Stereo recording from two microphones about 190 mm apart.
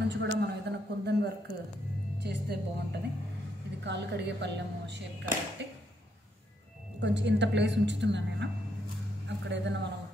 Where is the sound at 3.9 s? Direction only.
65° right (ahead or behind).